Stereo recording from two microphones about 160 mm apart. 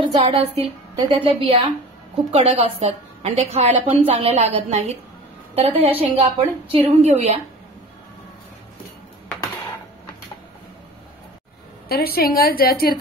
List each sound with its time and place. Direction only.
0.0 s a woman's voice: 35° right (ahead or behind)
11.9 s a woman's voice: 70° left (ahead or behind)